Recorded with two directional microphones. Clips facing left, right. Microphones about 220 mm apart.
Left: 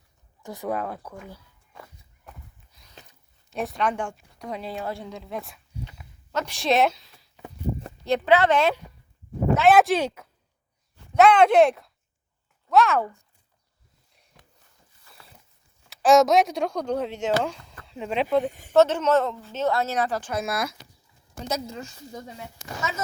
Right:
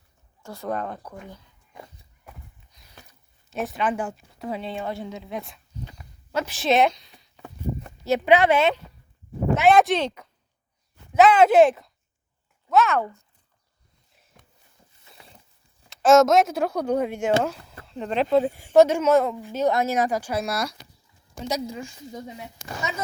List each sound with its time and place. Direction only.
0.4 s speech: 15° left (ahead or behind)
2.7 s a sound: 5° left (ahead or behind)
3.5 s a woman's voice: centre (ahead or behind)
5.7 s dog: 5° left (ahead or behind)
6.3 s a woman's voice: 5° right (ahead or behind)
9.6 s a woman's voice: 5° left (ahead or behind)
15.1 s a sound: 25° right (ahead or behind)
15.9 s a woman's voice: centre (ahead or behind)
18.6 s a woman's voice: 10° right (ahead or behind)
20.4 s a woman's voice: centre (ahead or behind)
21.4 s a woman's voice: 15° right (ahead or behind)